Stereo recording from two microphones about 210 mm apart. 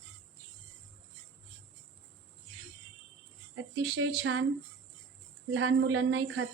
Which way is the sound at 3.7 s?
65° right (ahead or behind).